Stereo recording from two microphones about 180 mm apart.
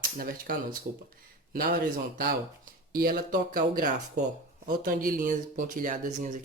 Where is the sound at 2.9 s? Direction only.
55° right (ahead or behind).